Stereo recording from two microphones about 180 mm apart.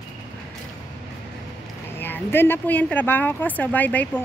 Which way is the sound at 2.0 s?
10° left (ahead or behind).